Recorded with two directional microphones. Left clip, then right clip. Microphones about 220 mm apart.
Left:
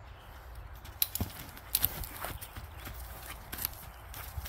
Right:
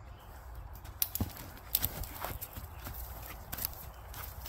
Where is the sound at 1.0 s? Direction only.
10° right (ahead or behind).